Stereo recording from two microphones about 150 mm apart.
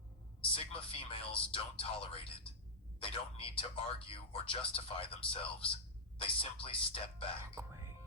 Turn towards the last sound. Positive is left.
turn(degrees=-20)  # may be behind; listen again after turning